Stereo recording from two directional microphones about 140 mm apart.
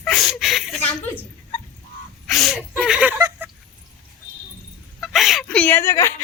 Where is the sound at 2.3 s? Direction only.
Centre (ahead or behind).